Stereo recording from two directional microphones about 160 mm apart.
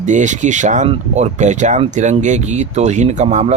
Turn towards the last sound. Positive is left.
turn(degrees=-45)  # may be behind; listen again after turning